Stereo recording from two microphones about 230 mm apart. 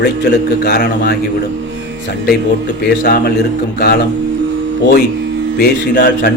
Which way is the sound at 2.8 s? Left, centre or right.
Left.